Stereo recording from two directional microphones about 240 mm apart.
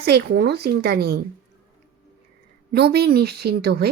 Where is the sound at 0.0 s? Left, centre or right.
Right.